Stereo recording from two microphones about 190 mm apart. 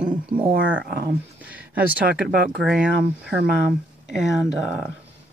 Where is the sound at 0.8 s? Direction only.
55° right (ahead or behind).